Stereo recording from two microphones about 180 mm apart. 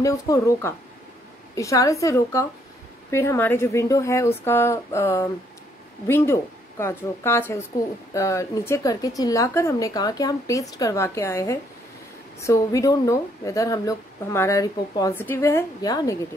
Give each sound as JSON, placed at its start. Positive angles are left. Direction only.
{"t": 0.0, "sound": "a woman's voice", "side_deg": 15}